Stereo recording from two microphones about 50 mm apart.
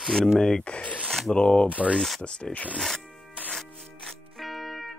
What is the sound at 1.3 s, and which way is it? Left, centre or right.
Speech, centre.